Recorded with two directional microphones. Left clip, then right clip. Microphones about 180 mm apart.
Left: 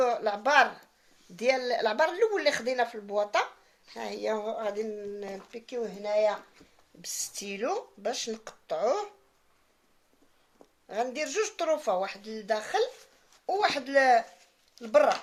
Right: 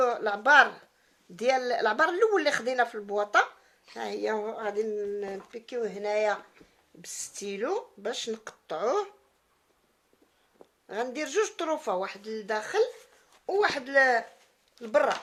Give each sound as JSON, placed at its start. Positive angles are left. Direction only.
{"t": 0.0, "sound": "speech", "side_deg": -20}
{"t": 7.0, "sound": "speech", "side_deg": -25}
{"t": 10.8, "sound": "speech", "side_deg": -30}